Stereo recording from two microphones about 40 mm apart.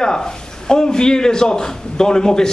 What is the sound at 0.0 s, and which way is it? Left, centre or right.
A man's voice, centre.